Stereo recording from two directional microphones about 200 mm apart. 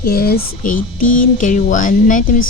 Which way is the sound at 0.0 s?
50° left (ahead or behind).